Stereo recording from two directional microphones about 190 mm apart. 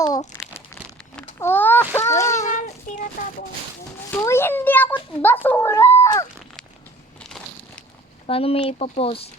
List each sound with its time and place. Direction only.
0.3 s crumpling: 20° left (ahead or behind)
1.1 s a sound: 10° left (ahead or behind)
2.4 s a sound: 40° left (ahead or behind)
4.1 s a child's voice: 10° left (ahead or behind)
7.2 s crushing: 5° left (ahead or behind)
8.3 s speech: 30° left (ahead or behind)